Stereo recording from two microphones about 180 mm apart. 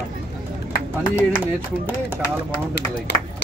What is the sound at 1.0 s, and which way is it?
Speech, 25° left (ahead or behind).